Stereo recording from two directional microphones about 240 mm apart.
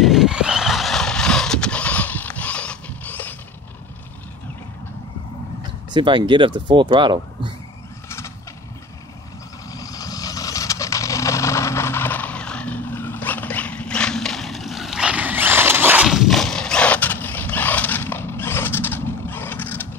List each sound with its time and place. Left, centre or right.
0.0 s vehicle: centre
5.6 s speech: centre
9.7 s vehicle: centre